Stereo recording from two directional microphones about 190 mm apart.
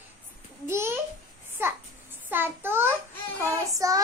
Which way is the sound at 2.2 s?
10° right (ahead or behind).